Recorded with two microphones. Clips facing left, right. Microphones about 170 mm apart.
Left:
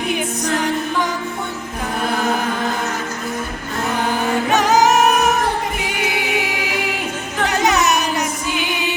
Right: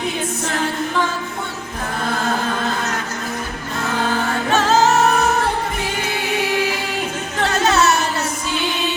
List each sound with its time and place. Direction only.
4.1 s music: 15° left (ahead or behind)
7.4 s music: 15° left (ahead or behind)